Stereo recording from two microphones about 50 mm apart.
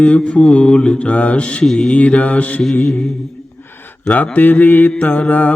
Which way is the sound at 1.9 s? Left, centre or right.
Left.